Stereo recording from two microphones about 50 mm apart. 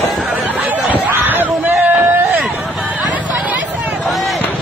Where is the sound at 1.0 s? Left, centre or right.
Right.